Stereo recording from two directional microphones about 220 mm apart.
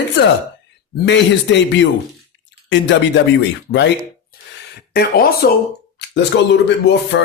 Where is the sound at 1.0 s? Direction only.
55° left (ahead or behind).